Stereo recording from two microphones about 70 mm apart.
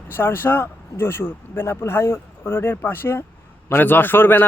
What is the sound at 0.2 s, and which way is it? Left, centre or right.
A man's voice, left.